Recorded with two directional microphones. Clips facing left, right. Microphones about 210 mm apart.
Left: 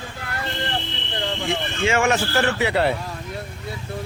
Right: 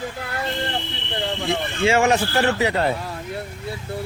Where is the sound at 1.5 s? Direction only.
35° right (ahead or behind).